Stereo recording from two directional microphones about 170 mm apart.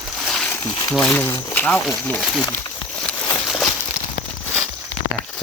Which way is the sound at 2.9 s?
10° left (ahead or behind).